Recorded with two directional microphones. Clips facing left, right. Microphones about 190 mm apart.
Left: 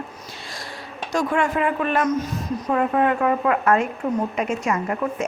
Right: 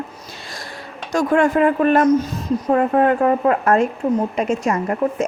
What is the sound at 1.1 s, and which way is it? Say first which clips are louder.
A woman's voice: right 6 dB; 45° right (ahead or behind).